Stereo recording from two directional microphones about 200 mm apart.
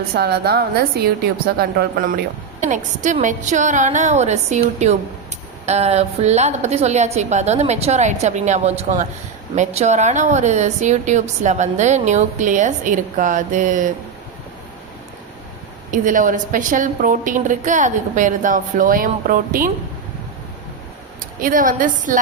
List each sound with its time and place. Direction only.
0.1 s a woman's voice: 50° right (ahead or behind)
15.9 s a woman's voice: 40° right (ahead or behind)
21.4 s a woman's voice: 45° right (ahead or behind)